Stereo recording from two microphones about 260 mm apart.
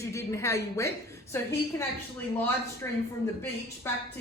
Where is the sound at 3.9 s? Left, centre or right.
Centre.